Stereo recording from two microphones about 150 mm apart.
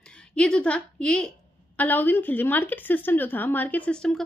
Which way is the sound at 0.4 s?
5° left (ahead or behind).